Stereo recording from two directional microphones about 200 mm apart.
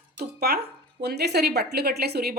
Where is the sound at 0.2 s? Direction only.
50° right (ahead or behind).